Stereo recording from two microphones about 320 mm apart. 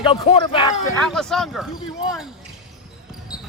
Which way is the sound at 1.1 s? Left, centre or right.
Centre.